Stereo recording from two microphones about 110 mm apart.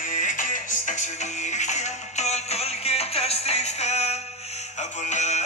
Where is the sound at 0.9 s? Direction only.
90° left.